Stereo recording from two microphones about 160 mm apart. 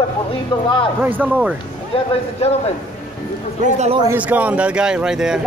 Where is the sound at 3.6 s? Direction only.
45° right (ahead or behind).